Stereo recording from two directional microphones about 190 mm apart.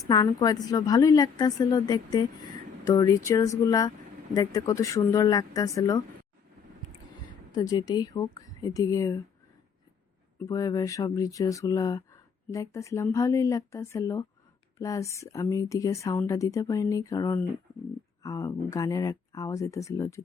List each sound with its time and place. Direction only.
0.1 s a woman's voice: 20° left (ahead or behind)
7.5 s a woman's voice: 20° left (ahead or behind)
10.4 s speech: 20° left (ahead or behind)